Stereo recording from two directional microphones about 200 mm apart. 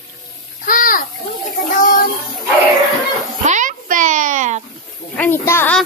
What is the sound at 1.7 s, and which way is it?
Child singing, 45° left (ahead or behind).